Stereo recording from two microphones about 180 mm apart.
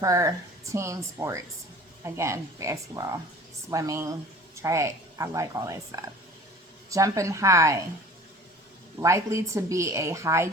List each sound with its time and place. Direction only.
0.0 s speech: 20° right (ahead or behind)
9.0 s speech: 15° right (ahead or behind)